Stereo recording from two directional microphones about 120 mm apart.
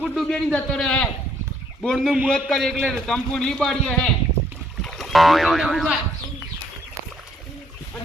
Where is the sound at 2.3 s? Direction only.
5° left (ahead or behind).